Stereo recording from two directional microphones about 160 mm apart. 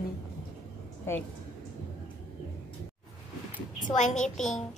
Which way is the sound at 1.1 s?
15° left (ahead or behind).